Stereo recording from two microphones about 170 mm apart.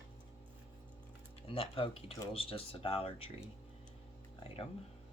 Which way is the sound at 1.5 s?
30° left (ahead or behind).